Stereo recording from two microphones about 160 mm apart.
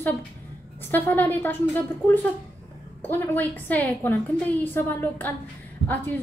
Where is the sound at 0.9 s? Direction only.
10° left (ahead or behind).